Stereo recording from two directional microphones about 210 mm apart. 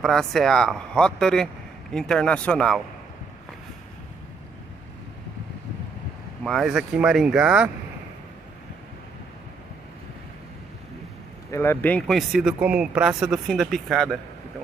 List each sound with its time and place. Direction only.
0.0 s a man's voice: centre (ahead or behind)
6.4 s a man's voice: centre (ahead or behind)
11.5 s a man's voice: 10° left (ahead or behind)